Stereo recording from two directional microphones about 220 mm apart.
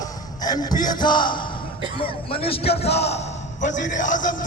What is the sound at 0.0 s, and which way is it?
A man's voice, 15° left (ahead or behind).